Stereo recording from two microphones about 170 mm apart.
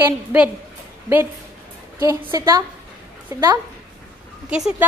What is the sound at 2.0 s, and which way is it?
Speech, 15° right (ahead or behind).